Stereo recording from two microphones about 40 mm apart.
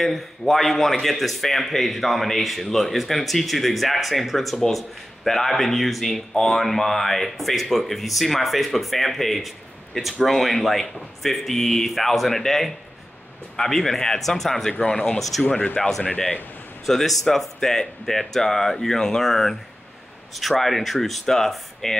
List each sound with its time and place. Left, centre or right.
0.0 s speech: centre
15.1 s speech: centre
15.4 s speech: left
16.8 s speech: centre